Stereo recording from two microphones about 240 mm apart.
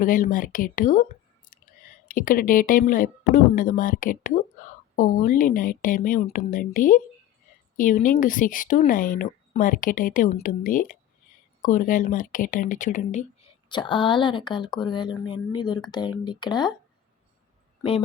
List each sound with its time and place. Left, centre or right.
0.0 s speech: left; by 16.7 s centre